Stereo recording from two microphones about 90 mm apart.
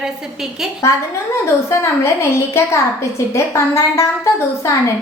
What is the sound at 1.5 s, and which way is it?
A woman's voice, 35° left (ahead or behind).